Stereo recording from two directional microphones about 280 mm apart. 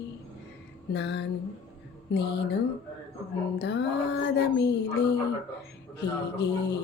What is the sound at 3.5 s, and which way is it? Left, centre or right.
Music, left.